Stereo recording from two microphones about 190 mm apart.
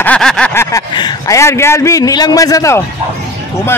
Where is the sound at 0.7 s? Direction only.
20° left (ahead or behind).